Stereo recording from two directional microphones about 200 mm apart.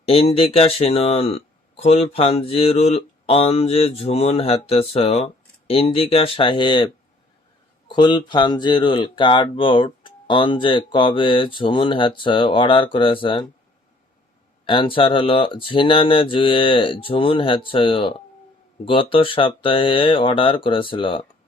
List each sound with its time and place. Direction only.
0.0 s speech: 30° left (ahead or behind)
14.6 s speech: 25° left (ahead or behind)